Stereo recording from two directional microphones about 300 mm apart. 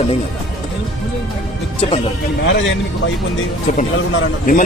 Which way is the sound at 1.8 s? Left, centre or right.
Centre.